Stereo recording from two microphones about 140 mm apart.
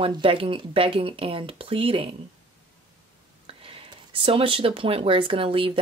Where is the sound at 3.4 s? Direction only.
40° right (ahead or behind).